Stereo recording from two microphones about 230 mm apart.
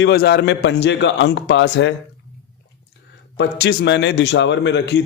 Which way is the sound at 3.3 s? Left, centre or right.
Left.